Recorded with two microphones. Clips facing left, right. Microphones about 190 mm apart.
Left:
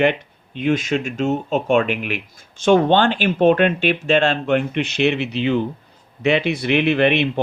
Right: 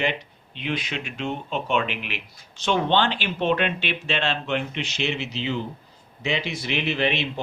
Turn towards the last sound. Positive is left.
turn(degrees=60)  # may be behind; listen again after turning